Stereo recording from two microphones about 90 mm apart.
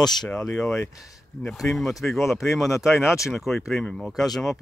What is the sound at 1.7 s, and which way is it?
Speech, centre (ahead or behind).